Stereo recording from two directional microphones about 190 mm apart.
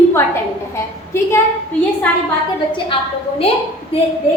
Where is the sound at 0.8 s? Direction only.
15° left (ahead or behind).